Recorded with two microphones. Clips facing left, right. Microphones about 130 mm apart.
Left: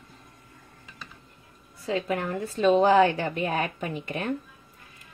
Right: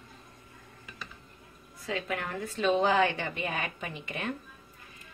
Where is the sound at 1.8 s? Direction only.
35° left (ahead or behind).